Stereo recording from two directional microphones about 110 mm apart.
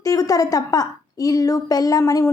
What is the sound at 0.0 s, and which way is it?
A woman's voice, 30° left (ahead or behind).